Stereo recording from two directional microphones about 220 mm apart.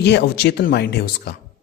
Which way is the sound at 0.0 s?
50° left (ahead or behind).